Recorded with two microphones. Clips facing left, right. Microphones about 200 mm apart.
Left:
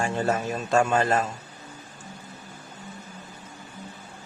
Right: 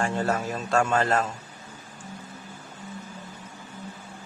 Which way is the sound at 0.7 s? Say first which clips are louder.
Left 1 dB; 15° left (ahead or behind).